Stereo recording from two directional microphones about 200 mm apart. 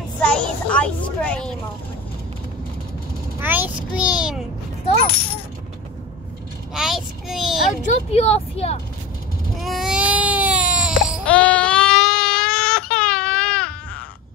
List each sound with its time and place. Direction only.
0.2 s a child's voice: 5° left (ahead or behind)
3.3 s a child's voice: 10° right (ahead or behind)
5.0 s speech: 10° left (ahead or behind)
6.7 s a child's voice: centre (ahead or behind)
7.8 s speech: 35° left (ahead or behind)
9.6 s baby cry: centre (ahead or behind)
11.2 s baby cry: 5° left (ahead or behind)